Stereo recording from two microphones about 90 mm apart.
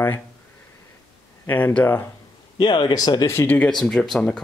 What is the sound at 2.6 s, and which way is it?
Speech, 55° left (ahead or behind).